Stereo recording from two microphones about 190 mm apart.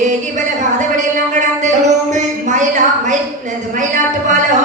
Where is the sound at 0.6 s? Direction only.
40° right (ahead or behind).